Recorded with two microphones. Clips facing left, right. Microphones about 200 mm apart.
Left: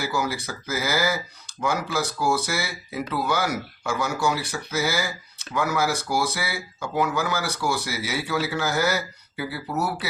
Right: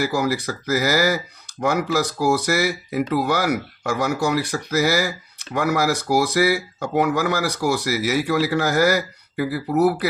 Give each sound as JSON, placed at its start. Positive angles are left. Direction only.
{"t": 0.2, "sound": "speech", "side_deg": -60}